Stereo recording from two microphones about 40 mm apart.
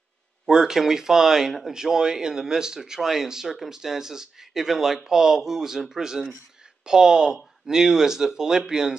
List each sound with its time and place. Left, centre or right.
0.5 s speech: centre